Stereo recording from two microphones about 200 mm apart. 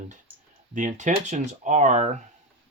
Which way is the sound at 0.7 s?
40° right (ahead or behind).